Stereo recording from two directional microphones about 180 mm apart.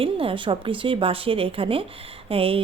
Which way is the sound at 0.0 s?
30° right (ahead or behind).